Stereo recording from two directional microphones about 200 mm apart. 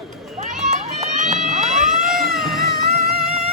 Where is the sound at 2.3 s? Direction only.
Centre (ahead or behind).